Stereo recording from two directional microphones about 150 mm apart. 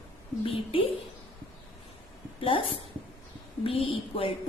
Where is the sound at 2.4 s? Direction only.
35° left (ahead or behind).